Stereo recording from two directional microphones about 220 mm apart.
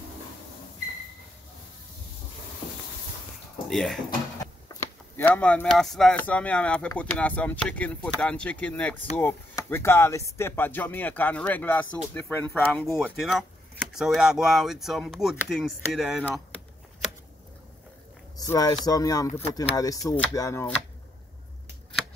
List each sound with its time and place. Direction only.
3.6 s speech: centre (ahead or behind)
5.1 s speech: 5° left (ahead or behind)
18.4 s speech: 15° left (ahead or behind)